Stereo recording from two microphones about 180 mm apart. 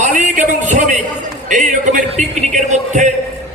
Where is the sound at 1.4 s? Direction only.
45° right (ahead or behind).